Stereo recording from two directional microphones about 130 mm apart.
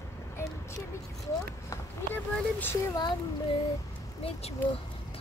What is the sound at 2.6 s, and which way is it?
Speech, 20° left (ahead or behind).